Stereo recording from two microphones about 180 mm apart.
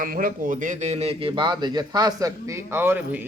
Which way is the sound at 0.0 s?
50° right (ahead or behind).